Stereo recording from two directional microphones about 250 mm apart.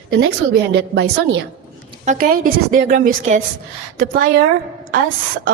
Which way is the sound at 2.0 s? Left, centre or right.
Right.